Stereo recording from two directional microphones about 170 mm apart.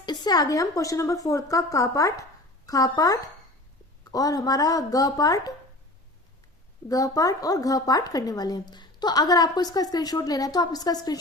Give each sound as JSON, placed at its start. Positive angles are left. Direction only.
{"t": 0.0, "sound": "a woman's voice", "side_deg": 25}
{"t": 6.8, "sound": "a woman's voice", "side_deg": 20}